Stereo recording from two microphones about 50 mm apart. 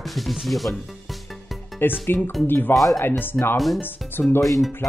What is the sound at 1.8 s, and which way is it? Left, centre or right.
Speech, left.